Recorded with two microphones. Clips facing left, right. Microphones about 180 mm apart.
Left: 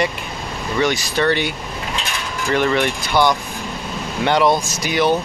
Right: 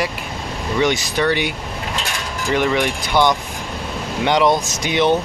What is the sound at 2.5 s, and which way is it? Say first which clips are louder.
Speech: even; 15° right (ahead or behind).